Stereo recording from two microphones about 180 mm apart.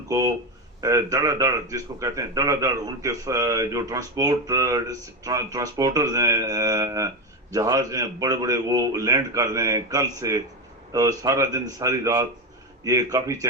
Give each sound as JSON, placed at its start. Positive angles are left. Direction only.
{"t": 0.1, "sound": "a man's voice", "side_deg": -20}